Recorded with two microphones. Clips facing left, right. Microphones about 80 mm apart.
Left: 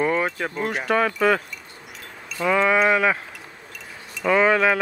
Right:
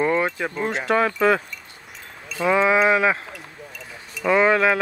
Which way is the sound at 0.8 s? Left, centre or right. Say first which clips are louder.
Right 1 dB; centre.